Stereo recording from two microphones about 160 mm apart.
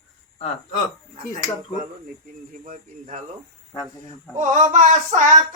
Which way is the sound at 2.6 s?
55° right (ahead or behind).